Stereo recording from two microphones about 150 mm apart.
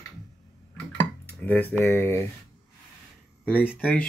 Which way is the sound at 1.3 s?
10° left (ahead or behind).